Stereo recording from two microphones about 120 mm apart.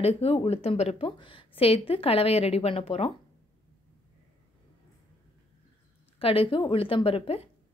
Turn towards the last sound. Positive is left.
turn(degrees=55)  # may be behind; listen again after turning